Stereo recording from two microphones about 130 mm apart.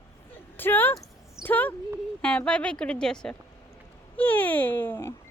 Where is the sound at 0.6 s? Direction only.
15° left (ahead or behind).